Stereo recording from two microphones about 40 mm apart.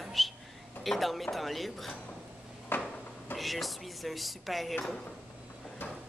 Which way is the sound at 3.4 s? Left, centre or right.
Centre.